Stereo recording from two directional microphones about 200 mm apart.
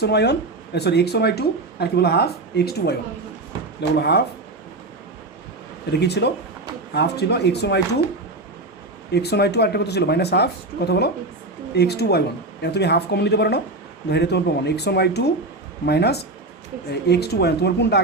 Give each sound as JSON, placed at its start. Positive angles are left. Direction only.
{"t": 0.0, "sound": "speech", "side_deg": 55}
{"t": 5.9, "sound": "speech", "side_deg": 55}
{"t": 9.1, "sound": "speech", "side_deg": 55}